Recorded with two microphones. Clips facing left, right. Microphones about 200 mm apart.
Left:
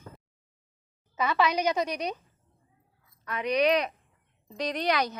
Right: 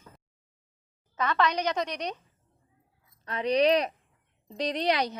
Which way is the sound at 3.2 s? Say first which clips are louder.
Right 1 dB; 35° right (ahead or behind).